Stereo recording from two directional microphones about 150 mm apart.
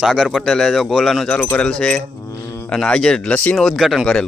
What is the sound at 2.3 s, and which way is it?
Insect, 20° left (ahead or behind).